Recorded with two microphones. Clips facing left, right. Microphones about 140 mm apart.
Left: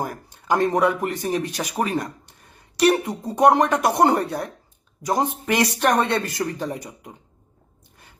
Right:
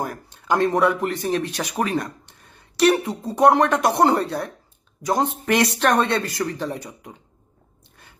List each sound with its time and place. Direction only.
0.0 s speech: 15° left (ahead or behind)
3.7 s speech: 5° left (ahead or behind)
4.0 s speech: 20° left (ahead or behind)